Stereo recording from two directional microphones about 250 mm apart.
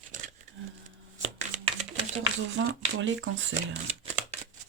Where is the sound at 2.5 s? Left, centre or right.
Right.